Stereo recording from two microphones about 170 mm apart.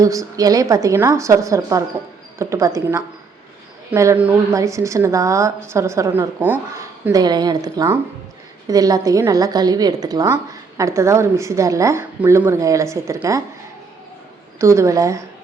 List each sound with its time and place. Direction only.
0.0 s a woman's voice: 20° right (ahead or behind)
14.6 s speech: 15° right (ahead or behind)